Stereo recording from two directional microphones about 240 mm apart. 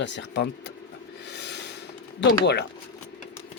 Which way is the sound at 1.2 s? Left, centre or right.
Left.